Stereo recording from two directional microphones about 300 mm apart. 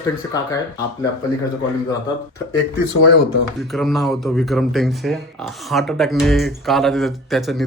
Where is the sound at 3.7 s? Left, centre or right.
Centre.